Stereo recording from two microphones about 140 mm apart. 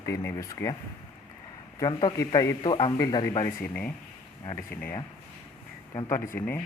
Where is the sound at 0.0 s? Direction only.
20° left (ahead or behind).